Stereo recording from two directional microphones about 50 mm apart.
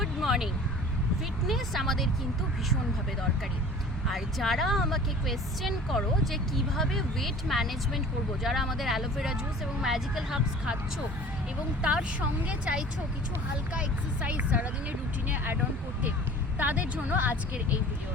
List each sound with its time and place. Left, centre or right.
0.0 s a sound: centre
1.5 s speech: centre
4.0 s a woman's voice: centre
11.8 s a woman's voice: centre
16.6 s a woman's voice: right